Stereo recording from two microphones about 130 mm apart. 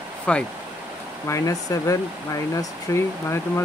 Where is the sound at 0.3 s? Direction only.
10° left (ahead or behind).